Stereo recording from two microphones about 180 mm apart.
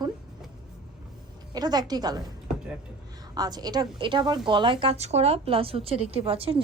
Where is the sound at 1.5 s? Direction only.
20° right (ahead or behind).